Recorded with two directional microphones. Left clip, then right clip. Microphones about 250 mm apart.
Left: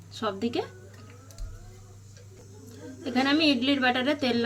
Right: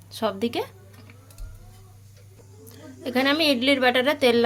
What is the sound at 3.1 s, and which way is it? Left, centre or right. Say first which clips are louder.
Speech: right 3 dB; right.